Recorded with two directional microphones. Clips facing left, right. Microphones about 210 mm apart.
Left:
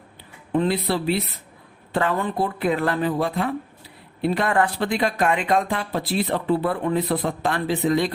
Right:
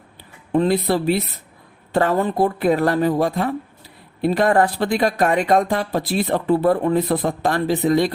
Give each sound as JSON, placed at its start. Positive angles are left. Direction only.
{"t": 0.5, "sound": "speech", "side_deg": -40}